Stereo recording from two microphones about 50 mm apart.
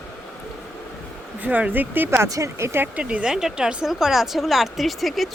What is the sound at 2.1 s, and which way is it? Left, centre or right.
Speech, right.